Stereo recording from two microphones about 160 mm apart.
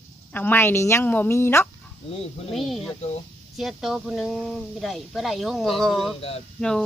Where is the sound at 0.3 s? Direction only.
15° left (ahead or behind).